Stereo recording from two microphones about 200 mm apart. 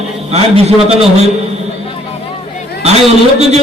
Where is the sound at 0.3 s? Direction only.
30° right (ahead or behind).